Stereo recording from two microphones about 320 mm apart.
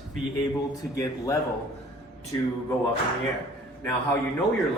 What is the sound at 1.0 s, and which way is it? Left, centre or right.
A man's voice, centre.